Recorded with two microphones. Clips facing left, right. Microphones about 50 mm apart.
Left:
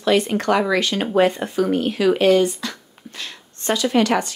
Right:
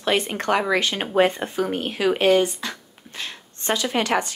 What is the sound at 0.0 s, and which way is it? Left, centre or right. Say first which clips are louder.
A woman's voice: left 4 dB; right.